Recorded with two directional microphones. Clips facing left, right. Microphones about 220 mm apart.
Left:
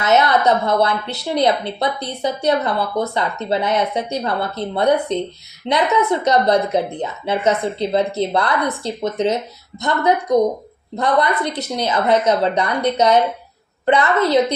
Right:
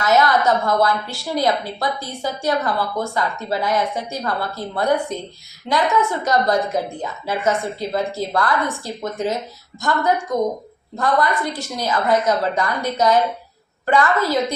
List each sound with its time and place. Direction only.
0.0 s a woman's voice: 20° left (ahead or behind)